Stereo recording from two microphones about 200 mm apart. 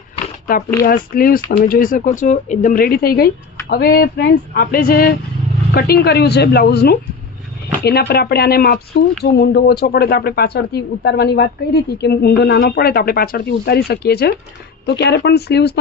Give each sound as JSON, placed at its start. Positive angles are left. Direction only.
{"t": 0.8, "sound": "speech", "side_deg": 45}